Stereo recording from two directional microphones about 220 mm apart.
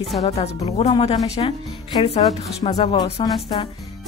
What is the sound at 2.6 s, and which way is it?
A woman's voice, 25° left (ahead or behind).